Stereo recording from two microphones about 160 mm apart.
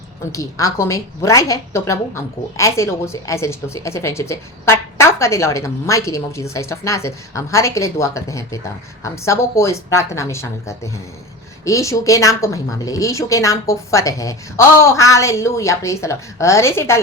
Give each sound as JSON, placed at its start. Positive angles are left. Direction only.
{"t": 0.3, "sound": "a woman's voice", "side_deg": 20}